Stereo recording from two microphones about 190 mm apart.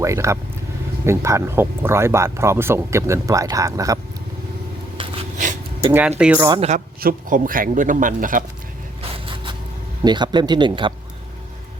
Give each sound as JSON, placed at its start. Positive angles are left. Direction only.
{"t": 0.0, "sound": "speech", "side_deg": -15}
{"t": 5.9, "sound": "speech", "side_deg": -10}
{"t": 6.5, "sound": "a man's voice", "side_deg": -35}
{"t": 7.0, "sound": "a man's voice", "side_deg": -45}
{"t": 9.0, "sound": "a sound", "side_deg": -25}
{"t": 10.0, "sound": "speech", "side_deg": -25}